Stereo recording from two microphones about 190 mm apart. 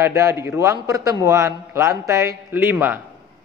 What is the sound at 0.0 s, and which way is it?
A man's voice, 15° right (ahead or behind).